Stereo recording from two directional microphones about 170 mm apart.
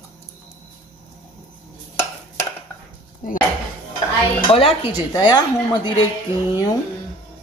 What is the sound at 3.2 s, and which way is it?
Speech, 50° left (ahead or behind).